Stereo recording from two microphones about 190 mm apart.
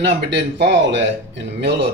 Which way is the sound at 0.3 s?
65° right (ahead or behind).